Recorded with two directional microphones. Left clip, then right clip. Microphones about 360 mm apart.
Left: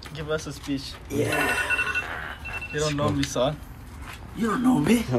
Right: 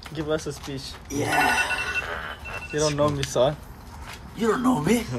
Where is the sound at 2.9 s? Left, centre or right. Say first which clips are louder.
Right 4 dB; right.